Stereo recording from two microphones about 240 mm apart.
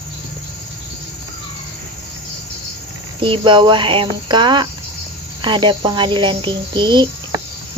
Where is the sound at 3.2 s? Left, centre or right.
Right.